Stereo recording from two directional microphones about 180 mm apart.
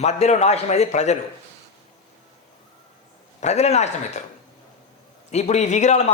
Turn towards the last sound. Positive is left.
turn(degrees=40)  # may be behind; listen again after turning